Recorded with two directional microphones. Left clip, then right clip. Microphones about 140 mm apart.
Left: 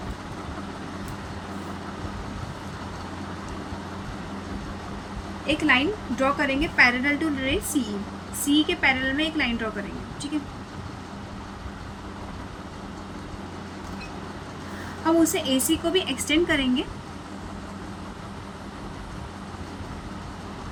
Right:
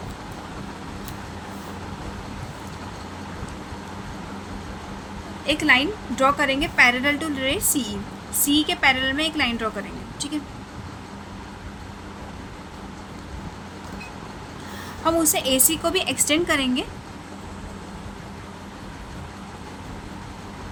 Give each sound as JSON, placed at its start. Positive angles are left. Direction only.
{"t": 5.5, "sound": "a woman's voice", "side_deg": -90}
{"t": 15.0, "sound": "a woman's voice", "side_deg": -85}